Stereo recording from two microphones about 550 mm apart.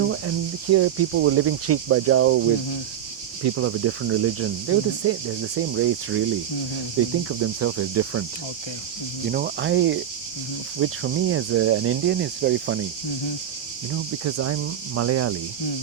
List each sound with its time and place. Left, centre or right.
0.0 s speech: right
3.4 s speech: right
7.3 s speech: right
9.3 s speech: centre
13.9 s speech: right